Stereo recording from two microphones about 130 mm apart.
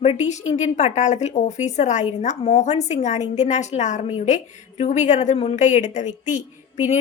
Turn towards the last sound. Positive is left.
turn(degrees=70)  # may be behind; listen again after turning